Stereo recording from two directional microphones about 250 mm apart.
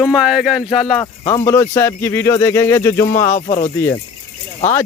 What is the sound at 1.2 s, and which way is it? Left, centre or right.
Speech, centre.